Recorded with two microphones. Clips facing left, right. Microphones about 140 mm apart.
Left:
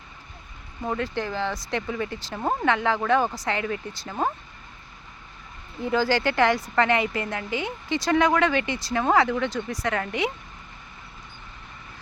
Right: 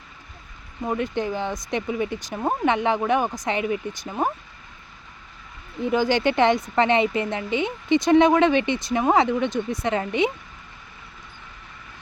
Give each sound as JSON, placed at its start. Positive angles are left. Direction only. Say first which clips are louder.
{"t": 0.9, "sound": "speech", "louder": "right 3 dB", "side_deg": -20}
{"t": 5.8, "sound": "speech", "louder": "right 2 dB", "side_deg": -20}